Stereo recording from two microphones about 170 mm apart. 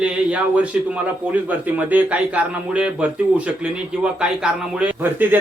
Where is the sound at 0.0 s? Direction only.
5° right (ahead or behind).